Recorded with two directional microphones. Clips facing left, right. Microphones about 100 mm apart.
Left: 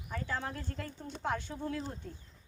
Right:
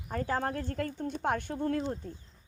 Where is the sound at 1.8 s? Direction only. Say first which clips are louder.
Right 7 dB; 45° right (ahead or behind).